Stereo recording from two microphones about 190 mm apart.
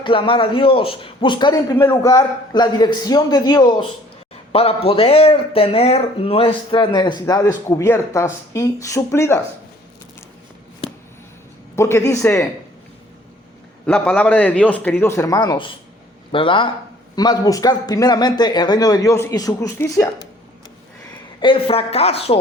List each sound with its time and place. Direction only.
0.0 s speech: 25° left (ahead or behind)
11.8 s a man's voice: 15° left (ahead or behind)
13.8 s a man's voice: 5° left (ahead or behind)
21.4 s speech: 30° left (ahead or behind)